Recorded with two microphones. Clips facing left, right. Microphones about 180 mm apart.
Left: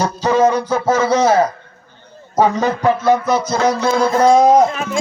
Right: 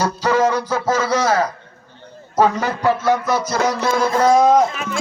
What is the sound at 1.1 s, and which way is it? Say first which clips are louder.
A man's voice: left 4 dB; 15° left (ahead or behind).